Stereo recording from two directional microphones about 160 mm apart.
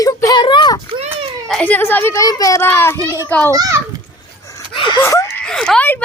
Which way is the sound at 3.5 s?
20° right (ahead or behind).